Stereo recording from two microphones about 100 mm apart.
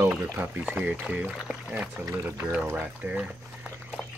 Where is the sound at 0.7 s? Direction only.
10° right (ahead or behind).